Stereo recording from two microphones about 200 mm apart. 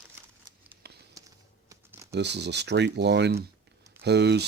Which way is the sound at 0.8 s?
55° right (ahead or behind).